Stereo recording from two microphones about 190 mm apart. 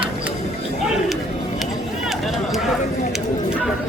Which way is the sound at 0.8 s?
Centre (ahead or behind).